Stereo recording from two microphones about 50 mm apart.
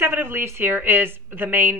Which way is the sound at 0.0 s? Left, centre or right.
Right.